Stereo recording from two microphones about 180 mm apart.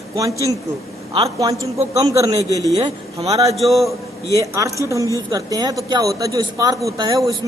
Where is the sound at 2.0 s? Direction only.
20° right (ahead or behind).